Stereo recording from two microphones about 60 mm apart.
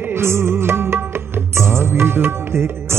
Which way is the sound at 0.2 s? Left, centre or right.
Right.